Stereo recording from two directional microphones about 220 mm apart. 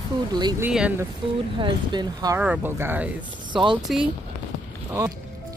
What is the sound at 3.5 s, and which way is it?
Speech, 20° right (ahead or behind).